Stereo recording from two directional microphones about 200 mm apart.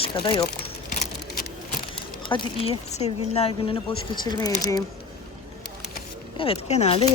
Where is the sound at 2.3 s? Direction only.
30° left (ahead or behind).